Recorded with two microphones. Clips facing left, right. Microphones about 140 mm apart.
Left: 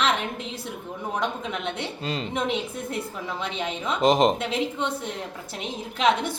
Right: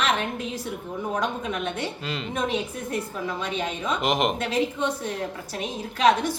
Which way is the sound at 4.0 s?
35° left (ahead or behind).